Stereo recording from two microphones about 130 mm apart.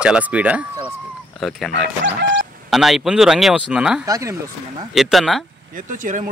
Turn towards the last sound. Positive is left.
turn(degrees=-80)